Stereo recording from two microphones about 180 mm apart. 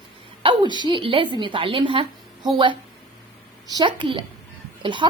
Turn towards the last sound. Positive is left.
turn(degrees=-25)  # may be behind; listen again after turning